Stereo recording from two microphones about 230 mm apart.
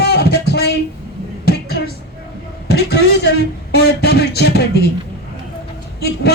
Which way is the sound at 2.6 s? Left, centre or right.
Left.